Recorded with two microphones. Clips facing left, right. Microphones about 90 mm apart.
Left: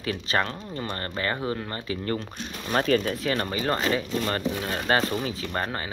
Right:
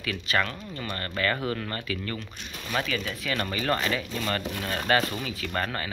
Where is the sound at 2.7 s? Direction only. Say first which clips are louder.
Left 7 dB; 40° left (ahead or behind).